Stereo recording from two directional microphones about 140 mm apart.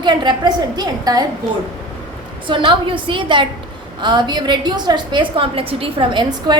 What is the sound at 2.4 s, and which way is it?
A woman's voice, 35° right (ahead or behind).